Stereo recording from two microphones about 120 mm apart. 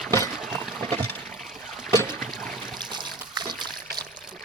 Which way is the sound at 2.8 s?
40° right (ahead or behind).